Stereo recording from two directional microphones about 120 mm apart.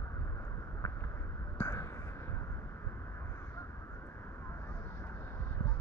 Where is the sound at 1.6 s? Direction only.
25° left (ahead or behind).